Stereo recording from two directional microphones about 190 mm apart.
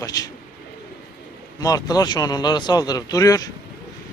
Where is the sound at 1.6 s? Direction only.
20° left (ahead or behind).